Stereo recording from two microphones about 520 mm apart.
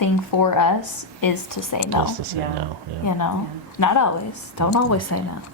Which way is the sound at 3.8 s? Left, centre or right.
Left.